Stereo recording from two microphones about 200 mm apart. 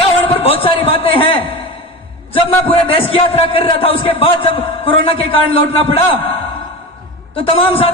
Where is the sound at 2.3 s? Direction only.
25° left (ahead or behind).